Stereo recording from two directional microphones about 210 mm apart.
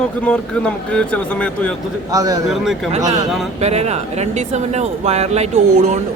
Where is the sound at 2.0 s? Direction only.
15° right (ahead or behind).